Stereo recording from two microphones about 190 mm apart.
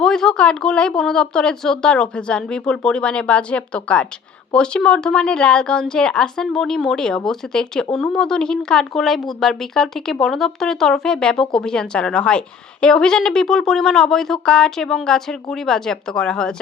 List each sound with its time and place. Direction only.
0.0 s speech: 5° left (ahead or behind)